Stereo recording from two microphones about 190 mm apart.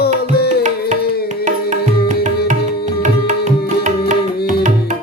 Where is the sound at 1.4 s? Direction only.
40° right (ahead or behind).